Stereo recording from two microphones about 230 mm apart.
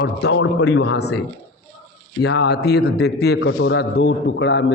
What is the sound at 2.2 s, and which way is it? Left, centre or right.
A man's voice, left.